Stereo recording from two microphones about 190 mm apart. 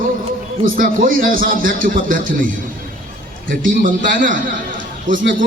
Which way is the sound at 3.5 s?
45° right (ahead or behind).